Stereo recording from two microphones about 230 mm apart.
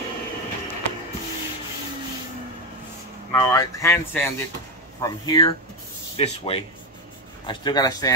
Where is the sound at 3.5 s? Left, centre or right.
Centre.